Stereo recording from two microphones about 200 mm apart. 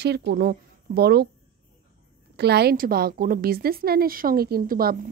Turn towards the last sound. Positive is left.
turn(degrees=-45)  # may be behind; listen again after turning